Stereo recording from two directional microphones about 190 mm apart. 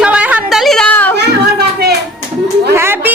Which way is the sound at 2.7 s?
10° right (ahead or behind).